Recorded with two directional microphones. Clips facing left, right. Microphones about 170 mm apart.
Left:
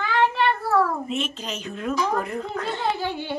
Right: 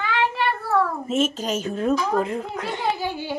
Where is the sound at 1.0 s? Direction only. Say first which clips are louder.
Right 6 dB; 45° right (ahead or behind).